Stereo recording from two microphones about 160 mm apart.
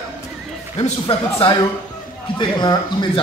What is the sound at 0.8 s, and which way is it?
Speech, 30° left (ahead or behind).